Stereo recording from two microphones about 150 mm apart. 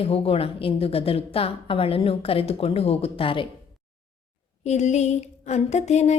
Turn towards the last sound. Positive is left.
turn(degrees=50)  # may be behind; listen again after turning